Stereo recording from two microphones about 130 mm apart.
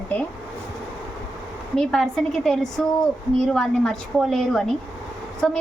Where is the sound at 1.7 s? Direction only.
5° left (ahead or behind).